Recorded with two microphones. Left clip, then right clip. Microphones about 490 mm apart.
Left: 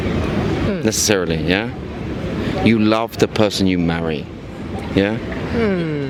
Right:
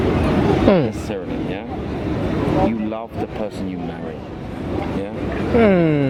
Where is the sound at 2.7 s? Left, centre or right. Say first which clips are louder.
Left 9 dB; left.